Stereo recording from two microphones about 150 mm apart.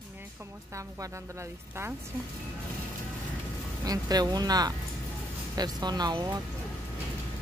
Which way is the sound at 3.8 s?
25° right (ahead or behind).